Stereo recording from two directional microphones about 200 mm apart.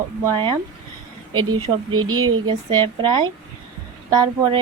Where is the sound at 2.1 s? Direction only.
90° right.